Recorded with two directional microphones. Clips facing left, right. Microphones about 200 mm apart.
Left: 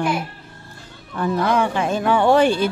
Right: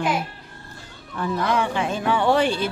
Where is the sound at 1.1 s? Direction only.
45° left (ahead or behind).